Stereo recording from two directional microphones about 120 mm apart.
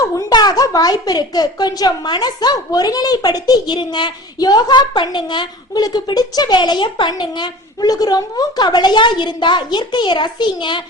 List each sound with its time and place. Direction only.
0.3 s a woman's voice: 35° left (ahead or behind)